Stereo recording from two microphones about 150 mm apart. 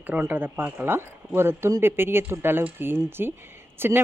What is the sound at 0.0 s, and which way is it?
Speech, 10° right (ahead or behind).